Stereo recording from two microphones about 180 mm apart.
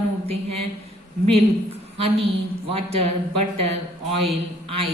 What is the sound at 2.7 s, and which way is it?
A woman's voice, 35° right (ahead or behind).